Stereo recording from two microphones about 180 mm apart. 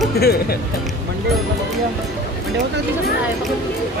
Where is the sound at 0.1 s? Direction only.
60° left (ahead or behind).